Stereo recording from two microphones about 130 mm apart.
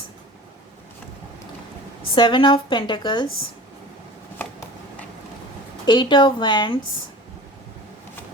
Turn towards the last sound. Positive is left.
turn(degrees=35)  # may be behind; listen again after turning